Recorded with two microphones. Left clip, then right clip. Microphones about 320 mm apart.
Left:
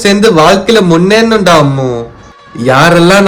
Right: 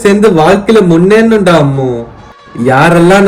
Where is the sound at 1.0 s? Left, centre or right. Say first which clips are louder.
Right 1 dB; centre.